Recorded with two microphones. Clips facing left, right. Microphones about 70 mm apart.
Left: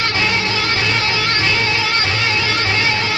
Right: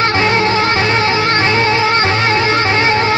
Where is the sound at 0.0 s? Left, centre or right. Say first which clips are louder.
Right 6 dB; right.